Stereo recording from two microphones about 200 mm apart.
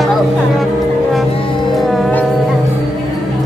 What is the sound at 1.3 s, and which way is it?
Music, 25° left (ahead or behind).